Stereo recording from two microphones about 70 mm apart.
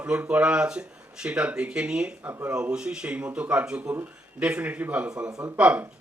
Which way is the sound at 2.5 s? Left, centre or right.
Centre.